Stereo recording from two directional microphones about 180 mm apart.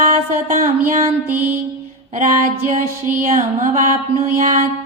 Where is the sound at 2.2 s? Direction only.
45° right (ahead or behind).